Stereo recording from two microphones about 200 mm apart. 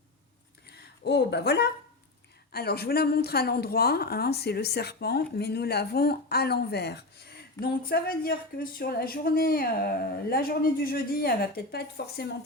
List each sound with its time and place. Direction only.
1.0 s a woman's voice: 55° left (ahead or behind)